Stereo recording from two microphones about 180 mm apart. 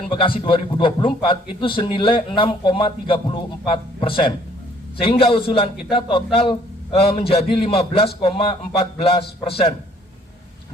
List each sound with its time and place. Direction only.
0.1 s a man's voice: 30° left (ahead or behind)